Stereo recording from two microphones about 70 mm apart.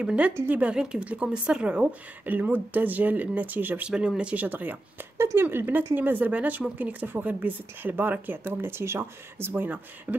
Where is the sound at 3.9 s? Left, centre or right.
Centre.